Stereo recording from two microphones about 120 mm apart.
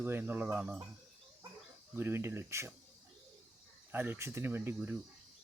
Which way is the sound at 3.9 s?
15° right (ahead or behind).